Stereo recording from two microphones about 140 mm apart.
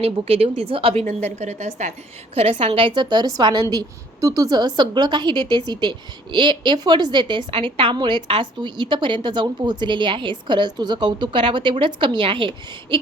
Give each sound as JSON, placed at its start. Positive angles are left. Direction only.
{"t": 0.0, "sound": "speech", "side_deg": -45}
{"t": 1.0, "sound": "a woman's voice", "side_deg": -55}
{"t": 2.3, "sound": "a woman's voice", "side_deg": -45}